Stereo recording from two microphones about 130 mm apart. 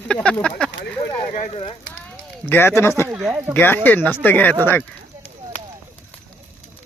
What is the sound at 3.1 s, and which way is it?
Speech, 5° right (ahead or behind).